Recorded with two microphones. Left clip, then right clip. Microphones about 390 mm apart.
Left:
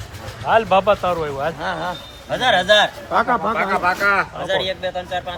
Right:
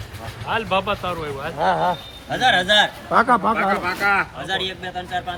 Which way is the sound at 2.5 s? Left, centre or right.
Centre.